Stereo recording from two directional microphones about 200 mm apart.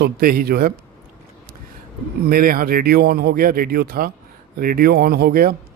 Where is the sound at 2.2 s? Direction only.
45° right (ahead or behind).